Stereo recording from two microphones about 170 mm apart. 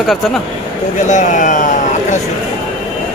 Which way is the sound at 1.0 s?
45° left (ahead or behind).